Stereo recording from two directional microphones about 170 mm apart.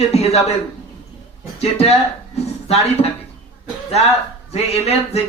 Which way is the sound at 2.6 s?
35° left (ahead or behind).